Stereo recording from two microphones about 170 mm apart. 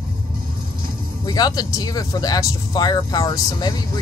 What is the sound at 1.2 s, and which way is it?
Speech, 25° left (ahead or behind).